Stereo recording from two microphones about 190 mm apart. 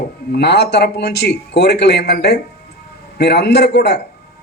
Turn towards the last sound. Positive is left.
turn(degrees=60)  # may be behind; listen again after turning